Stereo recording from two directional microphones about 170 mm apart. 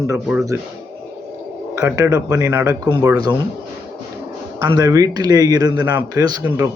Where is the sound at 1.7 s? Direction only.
15° right (ahead or behind).